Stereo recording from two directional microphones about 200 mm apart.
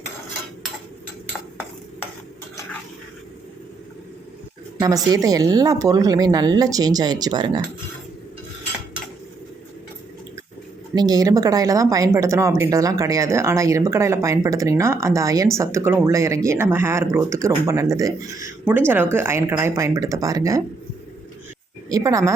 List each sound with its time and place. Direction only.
4.8 s speech: 20° right (ahead or behind)
10.9 s speech: 20° right (ahead or behind)
21.8 s a woman's voice: 15° right (ahead or behind)